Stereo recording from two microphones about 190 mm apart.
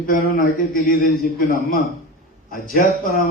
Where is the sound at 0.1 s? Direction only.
50° left (ahead or behind).